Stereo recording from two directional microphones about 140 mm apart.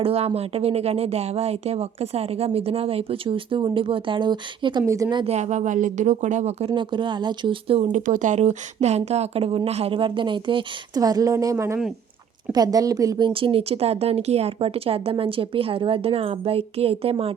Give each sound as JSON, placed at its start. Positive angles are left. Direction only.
{"t": 0.0, "sound": "speech", "side_deg": -45}
{"t": 5.2, "sound": "speech", "side_deg": -55}
{"t": 6.7, "sound": "speech", "side_deg": -35}
{"t": 7.9, "sound": "speech", "side_deg": -65}